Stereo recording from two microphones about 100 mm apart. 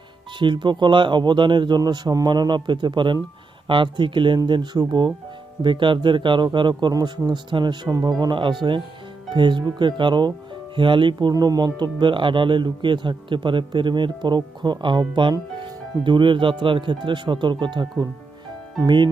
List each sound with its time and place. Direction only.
0.3 s speech: 50° right (ahead or behind)
7.9 s speech: 35° right (ahead or behind)
8.2 s speech: 50° right (ahead or behind)
18.9 s speech: 50° right (ahead or behind)